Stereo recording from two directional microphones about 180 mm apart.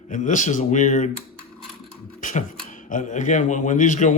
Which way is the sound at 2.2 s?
45° left (ahead or behind).